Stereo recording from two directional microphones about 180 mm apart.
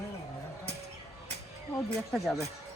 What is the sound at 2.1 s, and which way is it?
Speech, centre (ahead or behind).